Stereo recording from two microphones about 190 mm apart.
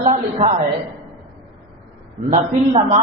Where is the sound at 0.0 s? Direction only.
35° right (ahead or behind).